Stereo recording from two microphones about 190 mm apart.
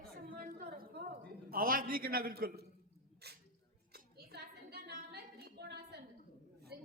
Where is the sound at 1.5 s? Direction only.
50° right (ahead or behind).